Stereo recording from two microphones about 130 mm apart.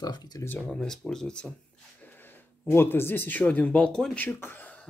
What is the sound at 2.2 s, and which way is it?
Speech, 15° left (ahead or behind).